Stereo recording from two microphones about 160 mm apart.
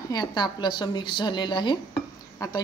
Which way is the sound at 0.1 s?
25° left (ahead or behind).